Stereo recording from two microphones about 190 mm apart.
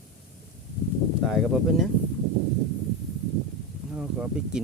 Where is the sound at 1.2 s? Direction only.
Centre (ahead or behind).